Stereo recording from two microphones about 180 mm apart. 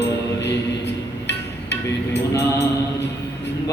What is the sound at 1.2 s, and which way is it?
Music, 75° left (ahead or behind).